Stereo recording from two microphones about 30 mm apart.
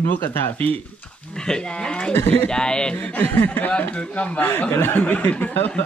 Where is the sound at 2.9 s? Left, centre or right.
Left.